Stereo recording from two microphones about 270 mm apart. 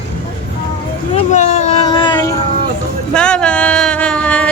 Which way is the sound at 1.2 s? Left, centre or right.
Left.